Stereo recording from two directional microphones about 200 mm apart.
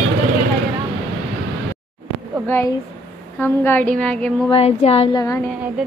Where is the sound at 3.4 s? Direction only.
10° left (ahead or behind).